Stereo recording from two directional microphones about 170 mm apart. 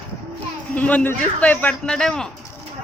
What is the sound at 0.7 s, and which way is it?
A man's voice, 10° left (ahead or behind).